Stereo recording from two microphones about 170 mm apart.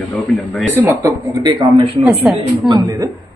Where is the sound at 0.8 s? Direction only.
20° right (ahead or behind).